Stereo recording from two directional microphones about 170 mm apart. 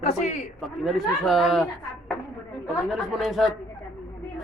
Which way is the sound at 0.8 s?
Centre (ahead or behind).